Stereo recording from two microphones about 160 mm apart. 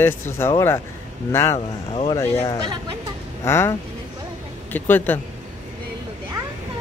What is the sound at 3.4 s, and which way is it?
Speech, 15° left (ahead or behind).